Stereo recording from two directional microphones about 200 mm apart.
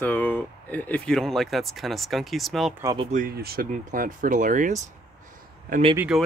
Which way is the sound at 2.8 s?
25° right (ahead or behind).